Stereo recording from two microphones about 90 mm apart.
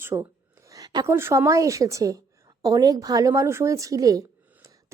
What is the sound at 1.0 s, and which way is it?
A woman's voice, 30° right (ahead or behind).